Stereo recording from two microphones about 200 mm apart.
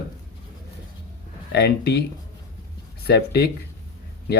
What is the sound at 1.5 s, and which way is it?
Speech, 55° left (ahead or behind).